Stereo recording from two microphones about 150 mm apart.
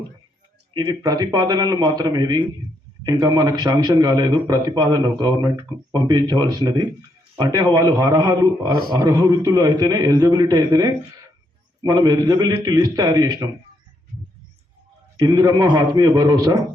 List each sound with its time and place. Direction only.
0.7 s a man's voice: 25° right (ahead or behind)
15.2 s a man's voice: 30° right (ahead or behind)